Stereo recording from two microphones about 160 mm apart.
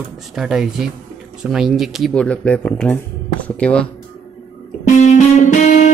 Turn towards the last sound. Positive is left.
turn(degrees=50)  # may be behind; listen again after turning